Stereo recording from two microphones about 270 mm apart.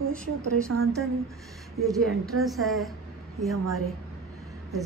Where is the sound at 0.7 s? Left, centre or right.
Right.